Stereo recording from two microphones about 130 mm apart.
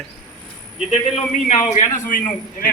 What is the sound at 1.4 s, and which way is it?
Speech, 65° left (ahead or behind).